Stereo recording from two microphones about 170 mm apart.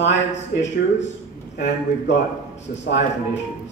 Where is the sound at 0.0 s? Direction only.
90° left.